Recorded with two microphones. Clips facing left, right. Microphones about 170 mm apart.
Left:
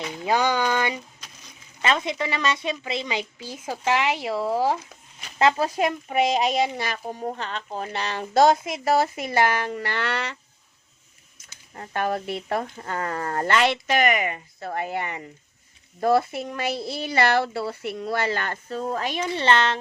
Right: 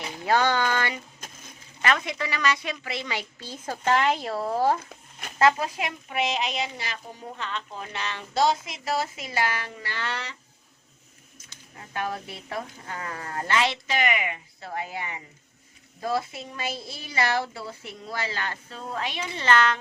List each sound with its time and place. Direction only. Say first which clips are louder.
0.3 s a sound: left 1 dB; 15° left (ahead or behind)
1.2 s a sound: right 4 dB; 50° right (ahead or behind)
1.8 s a woman's voice: left 2 dB; 25° left (ahead or behind)
5.4 s speech: left 1 dB; 25° left (ahead or behind)
5.6 s speech: left 8 dB; 40° left (ahead or behind); by 10.3 s 65° left (ahead or behind)
11.8 s a woman's voice: left 6 dB; 55° left (ahead or behind)
19.4 s speech: even; 25° left (ahead or behind)